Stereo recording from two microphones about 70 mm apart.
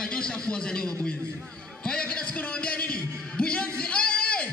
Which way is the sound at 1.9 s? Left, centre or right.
Centre.